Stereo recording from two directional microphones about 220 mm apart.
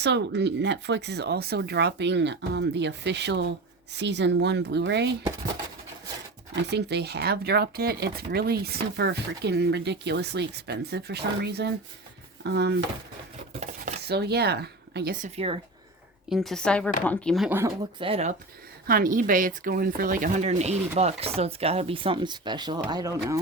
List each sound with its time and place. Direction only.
0.0 s speech: 50° right (ahead or behind)
6.6 s speech: 50° right (ahead or behind)
13.5 s dishes: 30° right (ahead or behind)
14.0 s speech: 50° right (ahead or behind); by 15.5 s 30° right (ahead or behind)
16.3 s speech: centre (ahead or behind)
18.0 s speech: 30° right (ahead or behind)
18.9 s speech: 40° right (ahead or behind); by 23.4 s 15° right (ahead or behind)